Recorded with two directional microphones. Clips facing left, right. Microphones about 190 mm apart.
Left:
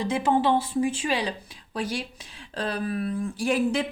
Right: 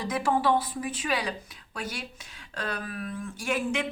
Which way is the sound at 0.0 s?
25° left (ahead or behind).